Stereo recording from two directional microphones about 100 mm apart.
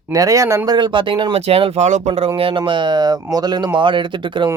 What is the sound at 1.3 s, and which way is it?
Speech, 85° right.